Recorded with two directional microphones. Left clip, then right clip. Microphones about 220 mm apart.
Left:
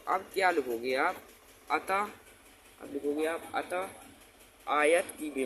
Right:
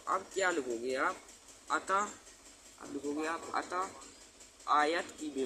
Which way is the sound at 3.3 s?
5° left (ahead or behind).